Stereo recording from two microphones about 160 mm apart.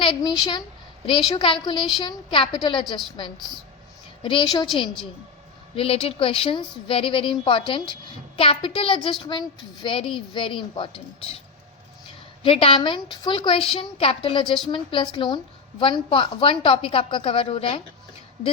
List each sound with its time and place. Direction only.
0.2 s a woman's voice: 25° left (ahead or behind)
1.6 s a woman's voice: 30° left (ahead or behind)
3.3 s speech: centre (ahead or behind)
4.2 s a woman's voice: 30° left (ahead or behind)
5.7 s a woman's voice: 35° left (ahead or behind)
12.4 s a woman's voice: 35° left (ahead or behind)